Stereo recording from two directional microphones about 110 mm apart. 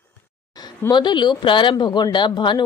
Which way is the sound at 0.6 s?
40° left (ahead or behind).